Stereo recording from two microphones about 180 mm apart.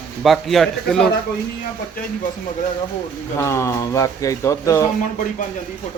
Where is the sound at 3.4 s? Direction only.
15° left (ahead or behind).